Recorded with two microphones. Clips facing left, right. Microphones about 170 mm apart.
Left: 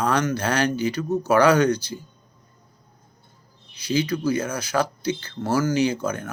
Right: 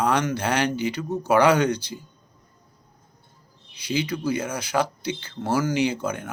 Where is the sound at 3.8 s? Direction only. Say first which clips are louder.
Left 3 dB; 25° right (ahead or behind).